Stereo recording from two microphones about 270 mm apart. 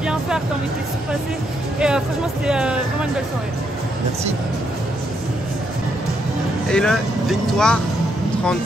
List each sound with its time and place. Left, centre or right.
0.0 s music: centre
1.8 s speech: centre
6.7 s speech: centre